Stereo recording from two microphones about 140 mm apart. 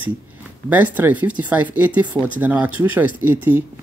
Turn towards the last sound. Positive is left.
turn(degrees=-15)  # may be behind; listen again after turning